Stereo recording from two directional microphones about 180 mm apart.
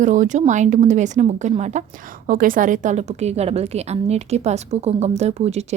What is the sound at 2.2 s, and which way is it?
Speech, 50° right (ahead or behind).